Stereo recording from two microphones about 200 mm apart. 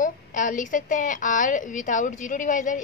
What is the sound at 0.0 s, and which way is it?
A woman's voice, 40° left (ahead or behind).